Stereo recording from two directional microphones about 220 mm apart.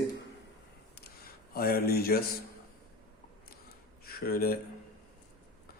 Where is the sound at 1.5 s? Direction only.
45° left (ahead or behind).